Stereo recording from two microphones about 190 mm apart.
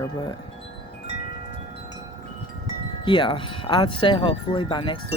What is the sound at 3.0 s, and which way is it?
Speech, 25° left (ahead or behind).